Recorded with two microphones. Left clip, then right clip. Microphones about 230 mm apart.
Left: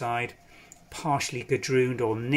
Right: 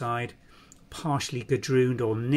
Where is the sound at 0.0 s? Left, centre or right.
Centre.